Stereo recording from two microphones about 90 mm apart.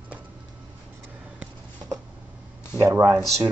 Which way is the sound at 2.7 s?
30° right (ahead or behind).